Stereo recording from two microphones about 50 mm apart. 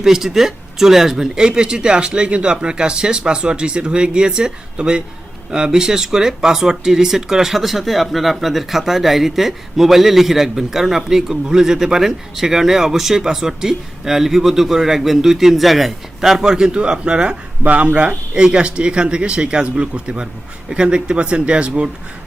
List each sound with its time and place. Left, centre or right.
0.0 s speech: centre
17.6 s speech: right